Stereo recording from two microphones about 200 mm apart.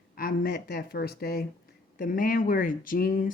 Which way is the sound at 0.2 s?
45° left (ahead or behind).